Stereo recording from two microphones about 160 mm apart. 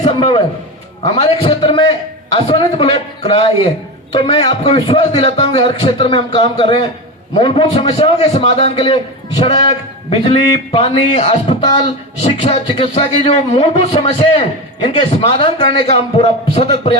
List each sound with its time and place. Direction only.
0.2 s speech: 25° left (ahead or behind)
12.2 s speech: 40° left (ahead or behind)